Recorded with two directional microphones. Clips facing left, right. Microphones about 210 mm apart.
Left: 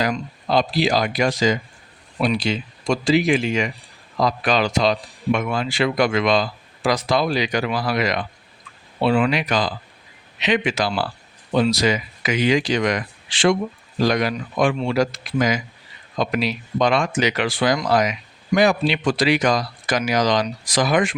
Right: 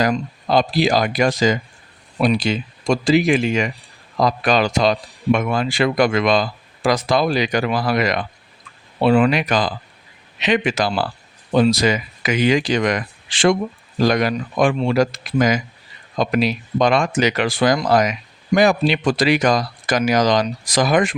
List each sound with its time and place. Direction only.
0.0 s speech: 45° right (ahead or behind)